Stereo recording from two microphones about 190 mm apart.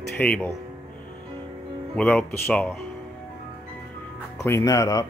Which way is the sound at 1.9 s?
5° left (ahead or behind).